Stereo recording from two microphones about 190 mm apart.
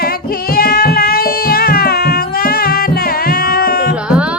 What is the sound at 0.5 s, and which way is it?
Music, 55° left (ahead or behind).